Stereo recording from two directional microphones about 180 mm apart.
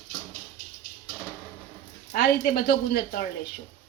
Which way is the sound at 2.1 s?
60° left (ahead or behind).